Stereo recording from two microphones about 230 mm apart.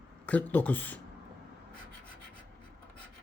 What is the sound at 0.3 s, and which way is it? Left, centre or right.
Speech, centre.